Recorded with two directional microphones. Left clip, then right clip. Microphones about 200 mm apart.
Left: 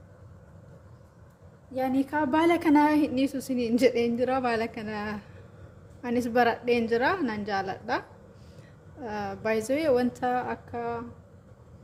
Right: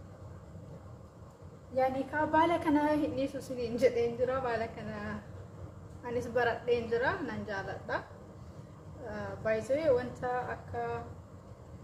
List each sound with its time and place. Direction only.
1.7 s a woman's voice: 55° left (ahead or behind)
9.0 s a woman's voice: 50° left (ahead or behind)